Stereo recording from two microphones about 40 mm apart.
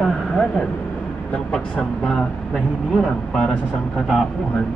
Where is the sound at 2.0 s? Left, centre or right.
Centre.